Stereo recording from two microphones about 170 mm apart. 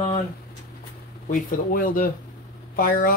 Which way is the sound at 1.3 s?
55° left (ahead or behind).